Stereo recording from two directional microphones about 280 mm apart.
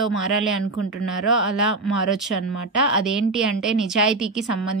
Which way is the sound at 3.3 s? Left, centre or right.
Centre.